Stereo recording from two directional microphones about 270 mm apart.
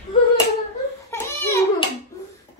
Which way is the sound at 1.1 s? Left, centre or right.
Centre.